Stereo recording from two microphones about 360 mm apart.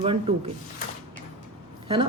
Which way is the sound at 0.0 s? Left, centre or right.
Centre.